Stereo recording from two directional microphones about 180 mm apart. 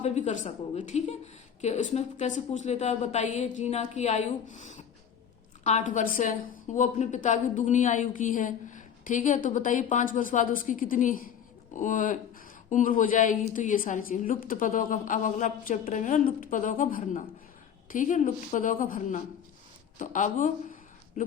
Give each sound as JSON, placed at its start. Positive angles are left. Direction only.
{"t": 0.0, "sound": "a woman's voice", "side_deg": 40}